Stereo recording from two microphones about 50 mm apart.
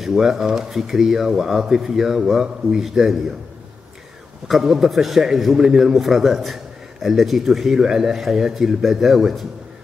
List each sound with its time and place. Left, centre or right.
0.0 s speech: centre
4.5 s a man's voice: centre